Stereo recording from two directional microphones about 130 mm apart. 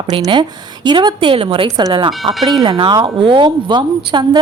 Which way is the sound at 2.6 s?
40° right (ahead or behind).